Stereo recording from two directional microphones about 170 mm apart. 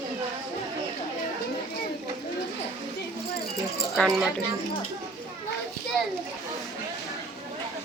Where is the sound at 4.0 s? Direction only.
Centre (ahead or behind).